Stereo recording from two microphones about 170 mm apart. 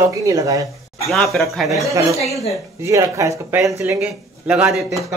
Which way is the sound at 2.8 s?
20° right (ahead or behind).